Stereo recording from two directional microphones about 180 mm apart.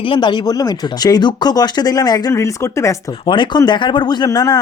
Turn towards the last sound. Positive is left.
turn(degrees=20)  # may be behind; listen again after turning